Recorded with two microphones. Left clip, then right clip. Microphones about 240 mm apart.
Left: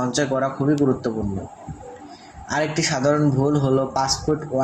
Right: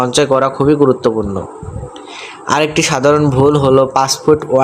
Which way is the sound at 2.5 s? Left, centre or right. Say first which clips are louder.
Right 9 dB; right.